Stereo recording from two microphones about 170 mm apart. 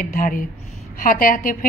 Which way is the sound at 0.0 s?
55° left (ahead or behind).